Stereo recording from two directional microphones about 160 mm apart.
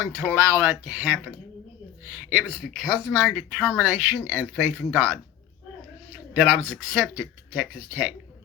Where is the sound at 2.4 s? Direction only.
Centre (ahead or behind).